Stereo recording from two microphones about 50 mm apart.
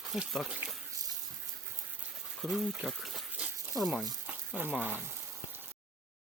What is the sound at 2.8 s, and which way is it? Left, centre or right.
Speech, centre.